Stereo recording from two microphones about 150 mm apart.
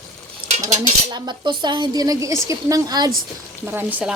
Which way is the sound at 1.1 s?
30° right (ahead or behind).